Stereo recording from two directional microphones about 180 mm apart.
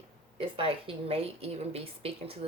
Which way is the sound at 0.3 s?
30° right (ahead or behind).